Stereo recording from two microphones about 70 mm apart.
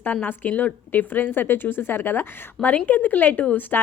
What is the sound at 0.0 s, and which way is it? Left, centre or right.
Speech, left.